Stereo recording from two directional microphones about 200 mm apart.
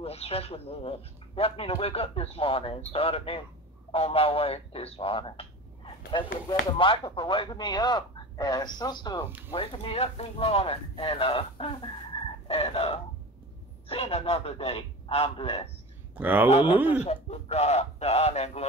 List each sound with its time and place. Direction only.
0.0 s a man's voice: 30° left (ahead or behind)
16.2 s speech: 10° right (ahead or behind)
16.4 s a man's voice: 30° left (ahead or behind)